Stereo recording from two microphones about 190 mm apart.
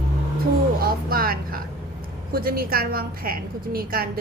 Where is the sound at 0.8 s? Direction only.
50° right (ahead or behind).